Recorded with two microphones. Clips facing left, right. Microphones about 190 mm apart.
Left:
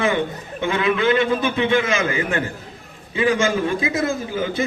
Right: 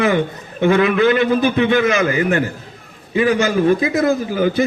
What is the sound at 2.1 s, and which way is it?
Speech, 40° right (ahead or behind).